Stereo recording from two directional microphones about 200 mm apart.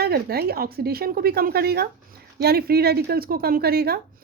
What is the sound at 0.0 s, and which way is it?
Speech, 50° right (ahead or behind).